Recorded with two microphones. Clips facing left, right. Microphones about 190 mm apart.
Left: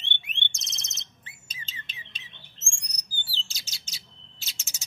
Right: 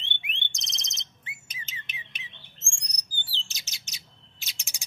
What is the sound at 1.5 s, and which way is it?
Bird, 20° right (ahead or behind).